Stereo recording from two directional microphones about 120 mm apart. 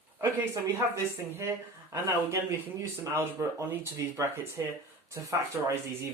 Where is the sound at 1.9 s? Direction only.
20° right (ahead or behind).